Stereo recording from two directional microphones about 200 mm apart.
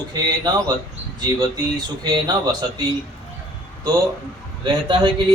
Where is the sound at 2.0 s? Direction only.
20° right (ahead or behind).